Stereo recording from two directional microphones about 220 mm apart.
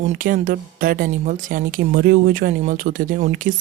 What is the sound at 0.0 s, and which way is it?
Speech, 35° right (ahead or behind).